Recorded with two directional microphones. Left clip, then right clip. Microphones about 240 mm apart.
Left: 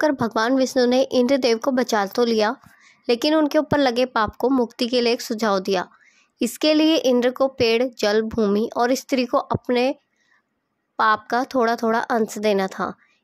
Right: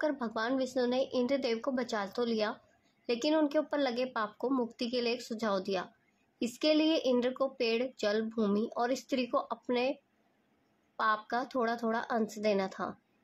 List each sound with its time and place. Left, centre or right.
0.0 s speech: left
11.0 s speech: left